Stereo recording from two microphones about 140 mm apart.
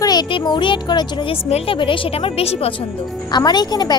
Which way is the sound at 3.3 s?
30° left (ahead or behind).